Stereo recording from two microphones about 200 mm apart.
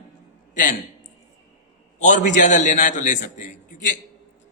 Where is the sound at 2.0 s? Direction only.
40° left (ahead or behind).